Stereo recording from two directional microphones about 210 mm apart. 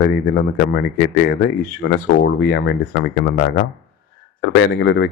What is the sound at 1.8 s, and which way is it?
Speech, 50° left (ahead or behind).